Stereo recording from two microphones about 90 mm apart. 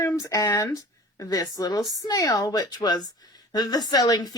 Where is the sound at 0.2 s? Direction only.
40° left (ahead or behind).